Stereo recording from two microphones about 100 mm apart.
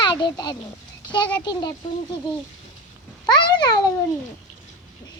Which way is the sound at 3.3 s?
50° left (ahead or behind).